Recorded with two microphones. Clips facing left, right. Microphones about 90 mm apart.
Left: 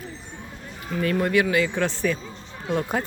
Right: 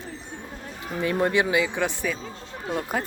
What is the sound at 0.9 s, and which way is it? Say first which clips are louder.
Speech: left 1 dB; 25° right (ahead or behind).